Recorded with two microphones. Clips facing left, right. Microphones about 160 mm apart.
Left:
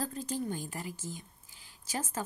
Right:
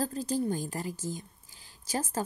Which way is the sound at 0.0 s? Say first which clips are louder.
Right 5 dB; 35° right (ahead or behind).